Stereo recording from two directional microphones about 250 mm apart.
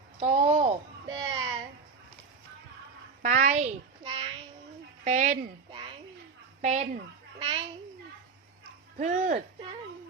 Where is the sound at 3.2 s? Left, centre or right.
Right.